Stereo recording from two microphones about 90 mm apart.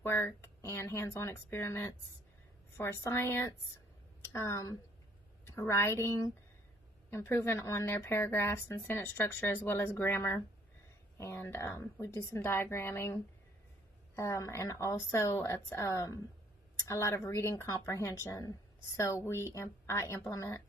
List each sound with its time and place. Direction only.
0.0 s a woman's voice: 30° left (ahead or behind)